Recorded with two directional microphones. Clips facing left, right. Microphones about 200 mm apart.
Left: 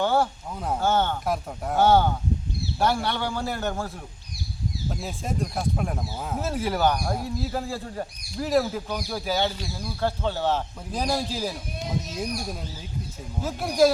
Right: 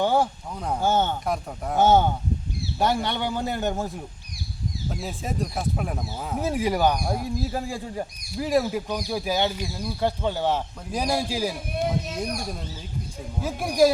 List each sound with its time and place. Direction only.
0.0 s a sound: 15° right (ahead or behind)
0.5 s speech: centre (ahead or behind)
0.8 s speech: 15° right (ahead or behind)
1.2 s speech: centre (ahead or behind)
1.8 s a man's voice: 20° right (ahead or behind)
4.9 s speech: centre (ahead or behind)
6.4 s speech: 15° right (ahead or behind)
11.7 s speech: 60° right (ahead or behind)
13.4 s speech: 15° right (ahead or behind)